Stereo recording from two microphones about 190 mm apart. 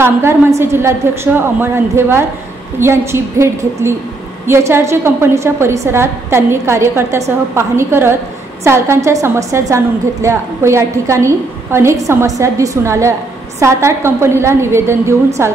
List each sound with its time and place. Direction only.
0.0 s a woman's voice: 15° right (ahead or behind)